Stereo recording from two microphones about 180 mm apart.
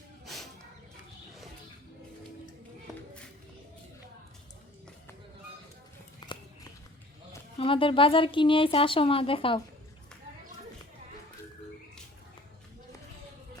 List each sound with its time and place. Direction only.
0.3 s a sound: centre (ahead or behind)
6.2 s horse: 25° left (ahead or behind)
7.6 s speech: 30° left (ahead or behind)